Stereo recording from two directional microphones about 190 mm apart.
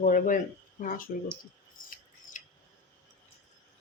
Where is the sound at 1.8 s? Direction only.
45° left (ahead or behind).